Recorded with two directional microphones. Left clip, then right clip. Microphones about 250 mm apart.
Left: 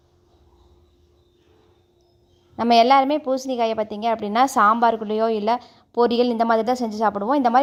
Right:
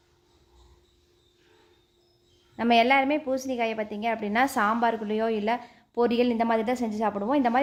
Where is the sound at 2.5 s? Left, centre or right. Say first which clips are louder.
Left 6 dB; left.